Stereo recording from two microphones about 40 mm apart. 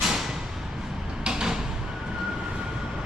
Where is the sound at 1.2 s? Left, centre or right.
Centre.